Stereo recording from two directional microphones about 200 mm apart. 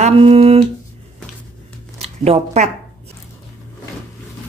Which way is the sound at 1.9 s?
30° right (ahead or behind).